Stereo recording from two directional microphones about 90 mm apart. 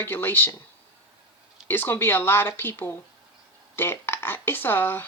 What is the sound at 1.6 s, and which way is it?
Speech, 25° left (ahead or behind).